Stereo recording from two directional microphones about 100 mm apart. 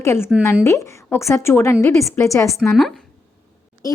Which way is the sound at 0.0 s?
30° left (ahead or behind).